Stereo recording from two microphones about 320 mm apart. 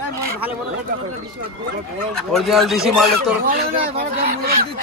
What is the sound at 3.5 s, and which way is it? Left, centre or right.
Speech, right.